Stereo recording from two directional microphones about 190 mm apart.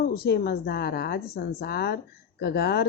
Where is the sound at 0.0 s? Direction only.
55° left (ahead or behind).